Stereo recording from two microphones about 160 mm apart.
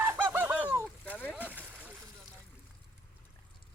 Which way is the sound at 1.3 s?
10° right (ahead or behind).